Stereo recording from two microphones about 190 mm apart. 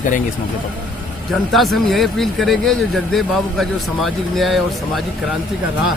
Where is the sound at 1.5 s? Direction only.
Centre (ahead or behind).